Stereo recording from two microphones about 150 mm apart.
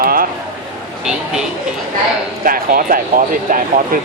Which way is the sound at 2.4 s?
70° right (ahead or behind).